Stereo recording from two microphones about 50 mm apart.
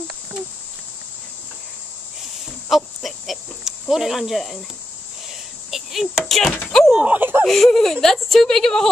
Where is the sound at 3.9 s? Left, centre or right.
Centre.